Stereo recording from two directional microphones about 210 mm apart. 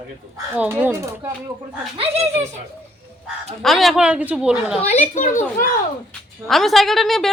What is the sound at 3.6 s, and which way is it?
A woman's voice, centre (ahead or behind).